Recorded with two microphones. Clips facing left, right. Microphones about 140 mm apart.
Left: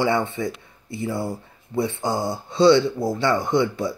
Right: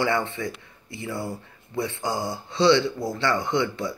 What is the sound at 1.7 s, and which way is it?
Speech, 25° left (ahead or behind).